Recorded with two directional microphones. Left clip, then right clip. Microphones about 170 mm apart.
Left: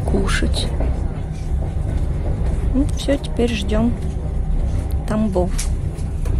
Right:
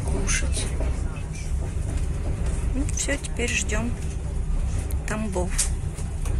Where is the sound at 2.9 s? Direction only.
20° left (ahead or behind).